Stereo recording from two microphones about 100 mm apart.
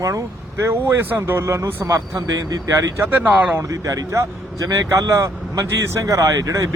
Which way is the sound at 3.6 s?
35° right (ahead or behind).